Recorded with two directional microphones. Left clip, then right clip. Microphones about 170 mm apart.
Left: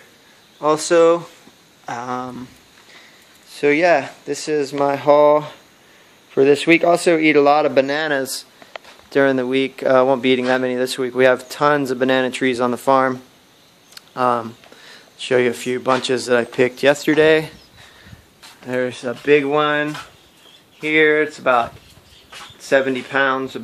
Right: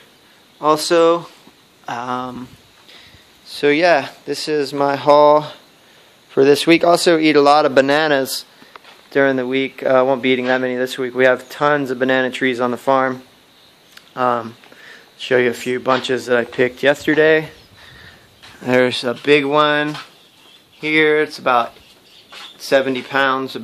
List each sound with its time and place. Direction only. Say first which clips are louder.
0.6 s speech: right 1 dB; 5° right (ahead or behind)
3.4 s speech: right 1 dB; 10° right (ahead or behind)
7.8 s a man's voice: right 5 dB; 45° right (ahead or behind)
8.2 s speech: right 3 dB; 25° right (ahead or behind)
9.1 s speech: even; 5° left (ahead or behind)
18.7 s speech: right 7 dB; 55° right (ahead or behind)
18.9 s speech: right 1 dB; 30° right (ahead or behind); by 21.6 s 15° right (ahead or behind)
22.7 s speech: right 1 dB; 10° right (ahead or behind)